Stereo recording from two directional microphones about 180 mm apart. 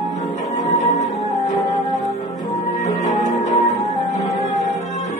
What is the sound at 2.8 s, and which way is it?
Music, 40° left (ahead or behind).